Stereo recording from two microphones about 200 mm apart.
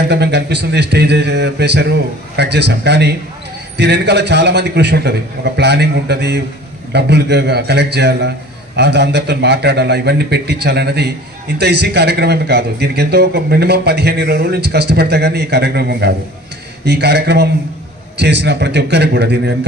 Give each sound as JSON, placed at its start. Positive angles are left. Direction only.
{"t": 0.1, "sound": "a man's voice", "side_deg": -55}